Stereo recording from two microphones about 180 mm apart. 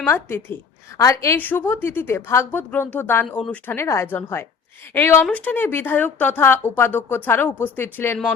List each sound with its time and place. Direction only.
0.0 s a woman's voice: 10° left (ahead or behind)